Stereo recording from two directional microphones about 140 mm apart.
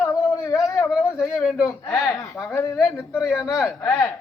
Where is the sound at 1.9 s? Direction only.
25° left (ahead or behind).